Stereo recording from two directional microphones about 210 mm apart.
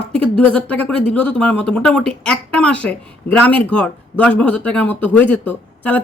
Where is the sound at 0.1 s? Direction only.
5° left (ahead or behind).